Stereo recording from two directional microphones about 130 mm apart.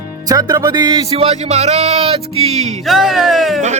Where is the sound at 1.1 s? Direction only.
50° right (ahead or behind).